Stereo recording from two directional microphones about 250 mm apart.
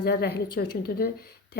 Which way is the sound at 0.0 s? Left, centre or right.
Left.